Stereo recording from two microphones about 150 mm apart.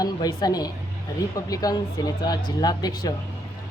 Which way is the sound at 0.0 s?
25° left (ahead or behind).